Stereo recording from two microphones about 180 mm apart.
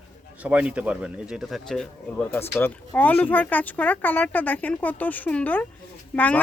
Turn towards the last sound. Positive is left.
turn(degrees=10)  # may be behind; listen again after turning